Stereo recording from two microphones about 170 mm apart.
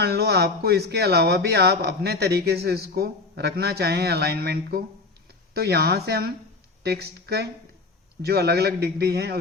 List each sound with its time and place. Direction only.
0.0 s speech: 70° right (ahead or behind)